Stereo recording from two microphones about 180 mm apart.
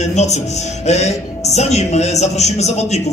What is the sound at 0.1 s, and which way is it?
A man's voice, 40° left (ahead or behind).